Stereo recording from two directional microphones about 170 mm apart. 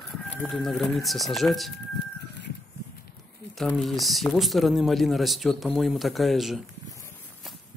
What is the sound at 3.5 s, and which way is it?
Speech, centre (ahead or behind).